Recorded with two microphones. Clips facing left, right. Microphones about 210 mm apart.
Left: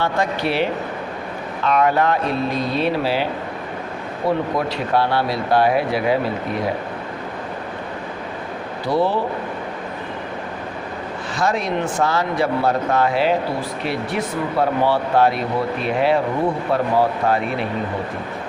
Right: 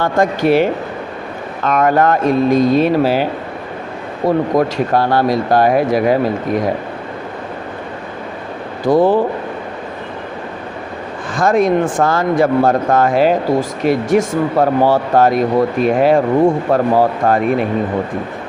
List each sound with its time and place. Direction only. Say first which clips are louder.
0.0 s speech: right 7 dB; 45° right (ahead or behind)
4.3 s speech: right 6 dB; 45° right (ahead or behind)
8.8 s speech: right 8 dB; 45° right (ahead or behind)
11.3 s speech: right 8 dB; 50° right (ahead or behind)